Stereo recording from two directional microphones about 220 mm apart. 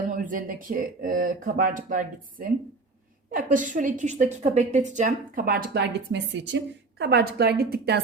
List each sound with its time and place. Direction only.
0.0 s a woman's voice: 35° right (ahead or behind)